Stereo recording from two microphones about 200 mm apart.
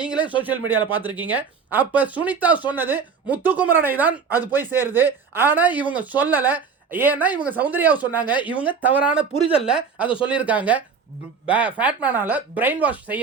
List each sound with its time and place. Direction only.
0.3 s speech: 10° right (ahead or behind)
9.4 s speech: 30° left (ahead or behind)
9.6 s speech: 5° right (ahead or behind)
10.1 s speech: 25° left (ahead or behind)
10.3 s speech: 5° right (ahead or behind)